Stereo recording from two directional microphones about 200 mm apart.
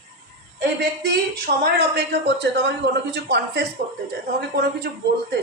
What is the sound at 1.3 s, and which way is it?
Speech, 55° right (ahead or behind).